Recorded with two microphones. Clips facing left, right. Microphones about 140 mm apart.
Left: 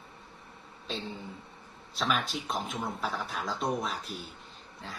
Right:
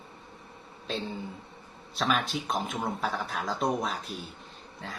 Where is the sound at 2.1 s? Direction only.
Centre (ahead or behind).